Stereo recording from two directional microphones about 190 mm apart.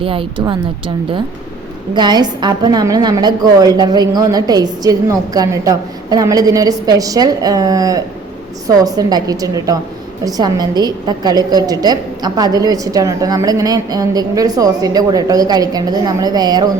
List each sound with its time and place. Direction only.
0.0 s a woman's voice: 30° right (ahead or behind)
1.9 s a woman's voice: 25° right (ahead or behind)